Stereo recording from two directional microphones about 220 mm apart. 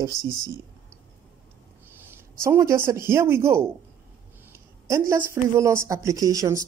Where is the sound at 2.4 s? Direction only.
10° right (ahead or behind).